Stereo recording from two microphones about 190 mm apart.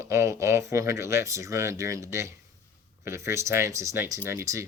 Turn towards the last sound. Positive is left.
turn(degrees=-15)  # may be behind; listen again after turning